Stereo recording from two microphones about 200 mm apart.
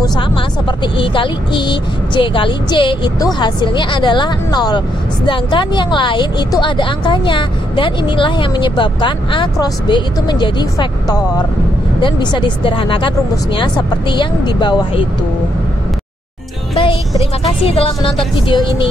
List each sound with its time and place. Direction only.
0.7 s speech: 25° left (ahead or behind)
17.2 s speech: 30° left (ahead or behind)